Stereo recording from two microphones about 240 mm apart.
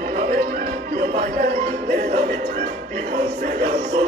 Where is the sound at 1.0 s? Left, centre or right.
Right.